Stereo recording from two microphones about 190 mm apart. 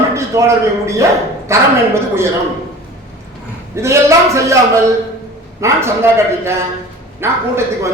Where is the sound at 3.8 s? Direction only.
15° right (ahead or behind).